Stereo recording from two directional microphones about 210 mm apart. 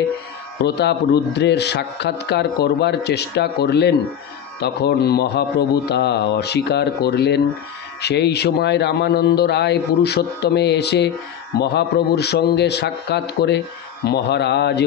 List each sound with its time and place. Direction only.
0.7 s speech: 50° left (ahead or behind)